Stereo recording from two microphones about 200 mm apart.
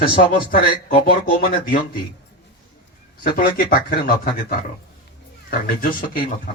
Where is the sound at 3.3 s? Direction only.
45° left (ahead or behind).